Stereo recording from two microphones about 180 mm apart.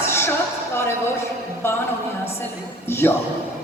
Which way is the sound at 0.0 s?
15° left (ahead or behind).